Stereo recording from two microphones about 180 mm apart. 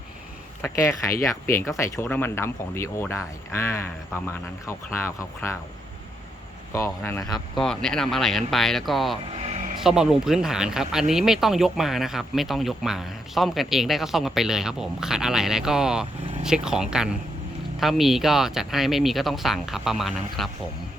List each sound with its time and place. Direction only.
0.6 s speech: 15° left (ahead or behind)
6.7 s speech: 15° left (ahead or behind)
7.6 s speech: 5° left (ahead or behind)
9.3 s vehicle: 40° right (ahead or behind)
9.8 s speech: 5° right (ahead or behind)